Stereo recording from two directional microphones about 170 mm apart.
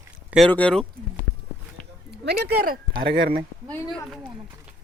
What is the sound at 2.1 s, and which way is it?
Speech, 75° right (ahead or behind).